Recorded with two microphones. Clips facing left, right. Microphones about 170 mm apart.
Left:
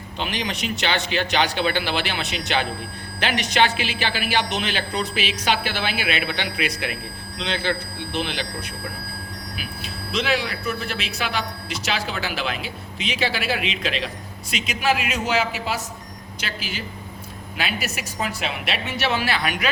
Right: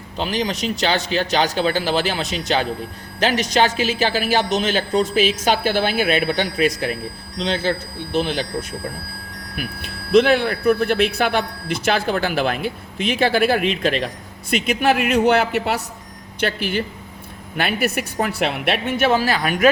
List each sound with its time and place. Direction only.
0.2 s speech: 35° right (ahead or behind)
9.6 s speech: 55° right (ahead or behind)